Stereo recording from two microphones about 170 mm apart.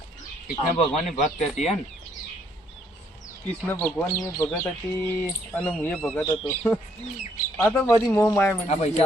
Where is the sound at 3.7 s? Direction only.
15° left (ahead or behind).